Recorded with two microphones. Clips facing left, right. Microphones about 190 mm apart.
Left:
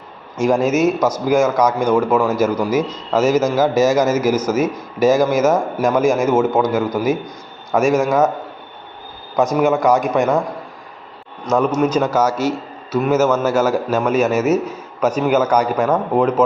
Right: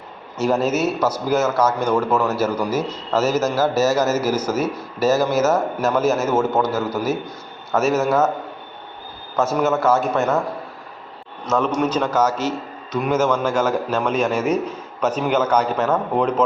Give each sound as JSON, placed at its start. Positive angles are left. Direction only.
{"t": 0.3, "sound": "a man's voice", "side_deg": 10}
{"t": 9.3, "sound": "a man's voice", "side_deg": 15}
{"t": 11.4, "sound": "a man's voice", "side_deg": 10}